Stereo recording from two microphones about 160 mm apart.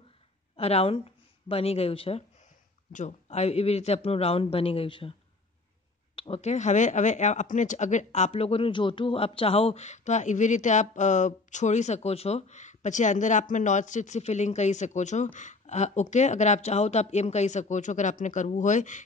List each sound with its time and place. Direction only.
0.6 s a woman's voice: 40° left (ahead or behind)
6.1 s speech: 35° left (ahead or behind)